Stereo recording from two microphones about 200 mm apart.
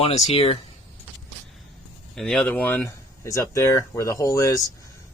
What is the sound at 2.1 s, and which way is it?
Speech, 5° left (ahead or behind).